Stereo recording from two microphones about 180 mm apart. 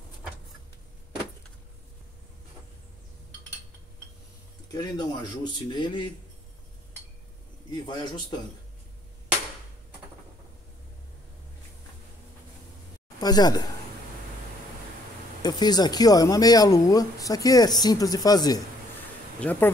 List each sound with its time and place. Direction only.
4.7 s speech: 25° left (ahead or behind)
7.7 s speech: 25° left (ahead or behind)
13.2 s speech: 20° left (ahead or behind)
15.4 s speech: 20° left (ahead or behind)
19.4 s speech: 10° left (ahead or behind)